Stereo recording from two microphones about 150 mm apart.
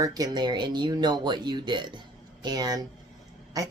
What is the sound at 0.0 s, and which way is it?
Speech, 25° right (ahead or behind).